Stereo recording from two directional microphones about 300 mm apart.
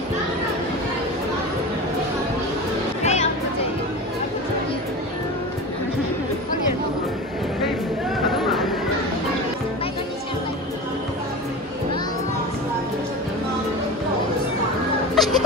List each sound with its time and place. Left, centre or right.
3.0 s music: left
8.3 s chatter: centre
15.1 s music: centre